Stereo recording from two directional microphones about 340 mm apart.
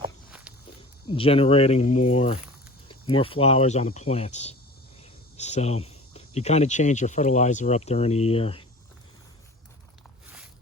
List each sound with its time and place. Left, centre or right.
0.3 s walk: centre
1.1 s speech: centre
10.2 s walk: centre